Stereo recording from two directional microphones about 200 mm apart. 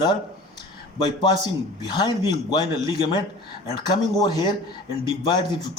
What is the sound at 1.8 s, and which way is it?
Speech, 20° left (ahead or behind).